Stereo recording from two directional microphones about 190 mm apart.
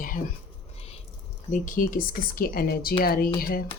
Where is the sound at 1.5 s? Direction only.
45° left (ahead or behind).